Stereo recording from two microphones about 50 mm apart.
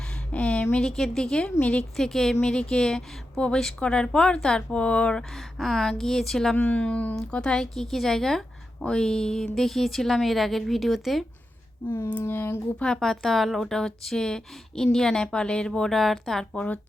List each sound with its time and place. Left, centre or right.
0.3 s a sound: left
0.8 s a woman's voice: centre
2.0 s a woman's voice: centre; by 5.1 s left
5.3 s a woman's voice: centre
6.6 s speech: left
7.2 s a woman's voice: centre
11.9 s child singing: left
12.2 s speech: left
12.8 s a woman's voice: centre
16.6 s speech: left